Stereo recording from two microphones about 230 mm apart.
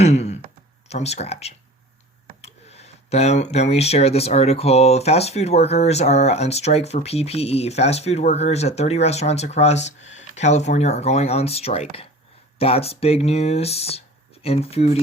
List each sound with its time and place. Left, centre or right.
0.0 s speech: left